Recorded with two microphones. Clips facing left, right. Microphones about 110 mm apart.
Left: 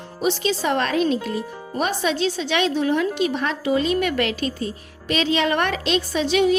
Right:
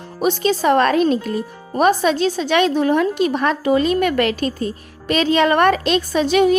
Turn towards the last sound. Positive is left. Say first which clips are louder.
# right 4 dB
turn(degrees=-50)  # may be behind; listen again after turning